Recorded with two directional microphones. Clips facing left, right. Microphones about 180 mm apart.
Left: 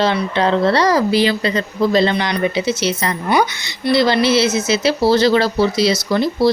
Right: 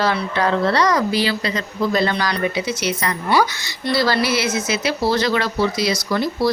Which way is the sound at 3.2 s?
15° left (ahead or behind).